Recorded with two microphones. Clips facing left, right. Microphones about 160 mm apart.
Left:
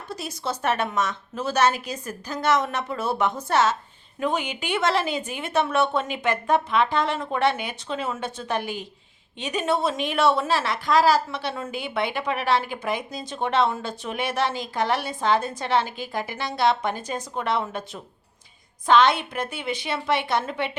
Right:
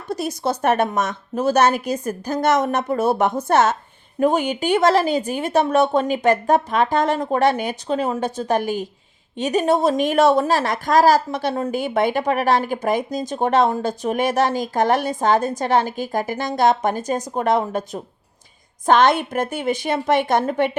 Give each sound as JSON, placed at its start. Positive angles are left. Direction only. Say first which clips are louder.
{"t": 0.6, "sound": "a woman's voice", "louder": "right 5 dB", "side_deg": -45}